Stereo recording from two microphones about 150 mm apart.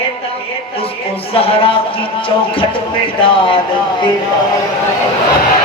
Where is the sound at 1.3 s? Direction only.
35° left (ahead or behind).